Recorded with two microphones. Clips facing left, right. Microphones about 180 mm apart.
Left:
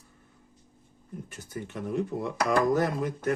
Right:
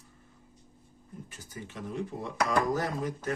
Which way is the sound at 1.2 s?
60° left (ahead or behind).